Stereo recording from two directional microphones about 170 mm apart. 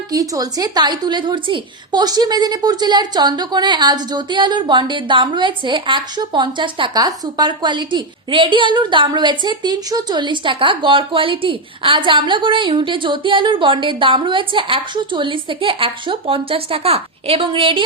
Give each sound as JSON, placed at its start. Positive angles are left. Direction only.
{"t": 0.1, "sound": "a woman's voice", "side_deg": -20}